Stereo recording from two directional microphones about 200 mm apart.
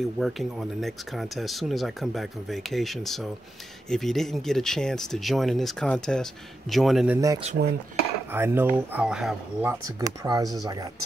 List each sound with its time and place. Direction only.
0.2 s speech: centre (ahead or behind)
7.6 s dishes: 60° right (ahead or behind)
8.3 s speech: 10° right (ahead or behind)
9.7 s speech: 15° right (ahead or behind)